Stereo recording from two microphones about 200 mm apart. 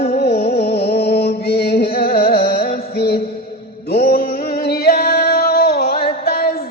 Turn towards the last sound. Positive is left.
turn(degrees=50)  # may be behind; listen again after turning